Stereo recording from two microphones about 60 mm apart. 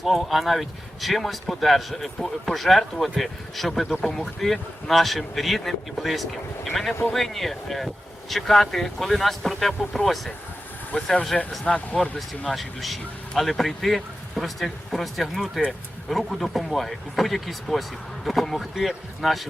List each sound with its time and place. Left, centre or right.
0.0 s speech: centre; by 12.0 s left
12.1 s speech: centre